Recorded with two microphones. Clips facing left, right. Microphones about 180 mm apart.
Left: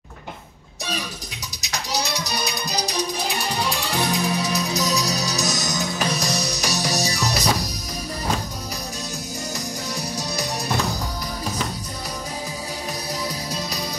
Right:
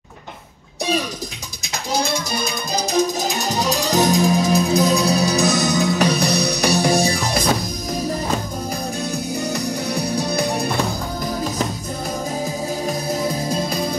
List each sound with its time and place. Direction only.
1.6 s music: 50° right (ahead or behind)
9.4 s music: 65° right (ahead or behind)
12.8 s music: 50° right (ahead or behind)